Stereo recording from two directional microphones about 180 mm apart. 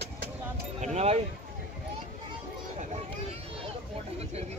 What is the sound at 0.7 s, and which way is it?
Speech, 40° right (ahead or behind).